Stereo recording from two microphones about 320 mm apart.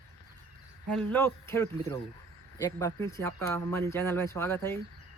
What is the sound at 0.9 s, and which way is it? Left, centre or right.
Speech, centre.